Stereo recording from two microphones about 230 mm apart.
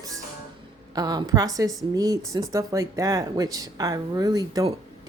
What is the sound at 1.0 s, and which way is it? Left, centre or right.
Speech, centre.